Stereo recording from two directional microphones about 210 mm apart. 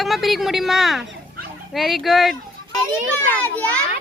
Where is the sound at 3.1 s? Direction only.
10° left (ahead or behind).